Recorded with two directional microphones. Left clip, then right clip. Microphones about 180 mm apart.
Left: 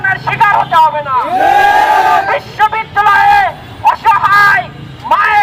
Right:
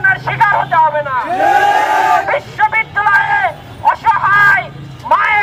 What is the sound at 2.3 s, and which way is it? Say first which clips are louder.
Bow-wow: left 2 dB; 20° left (ahead or behind).